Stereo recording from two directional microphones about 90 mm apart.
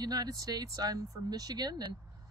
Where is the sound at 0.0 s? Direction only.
45° right (ahead or behind).